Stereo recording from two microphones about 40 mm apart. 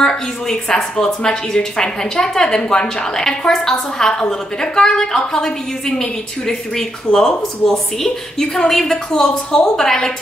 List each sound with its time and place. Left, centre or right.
0.0 s a woman's voice: centre